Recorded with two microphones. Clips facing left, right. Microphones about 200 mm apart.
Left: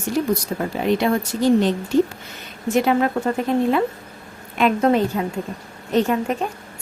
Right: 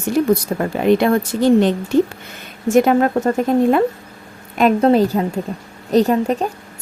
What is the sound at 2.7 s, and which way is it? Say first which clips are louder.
A woman's voice: right 5 dB; 45° right (ahead or behind).